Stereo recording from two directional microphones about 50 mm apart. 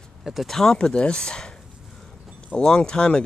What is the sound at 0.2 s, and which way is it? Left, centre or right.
Speech, centre.